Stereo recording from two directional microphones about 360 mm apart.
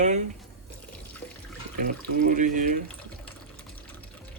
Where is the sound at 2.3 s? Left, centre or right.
Right.